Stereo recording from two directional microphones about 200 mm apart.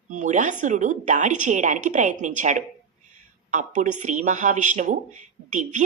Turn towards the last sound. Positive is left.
turn(degrees=-40)  # may be behind; listen again after turning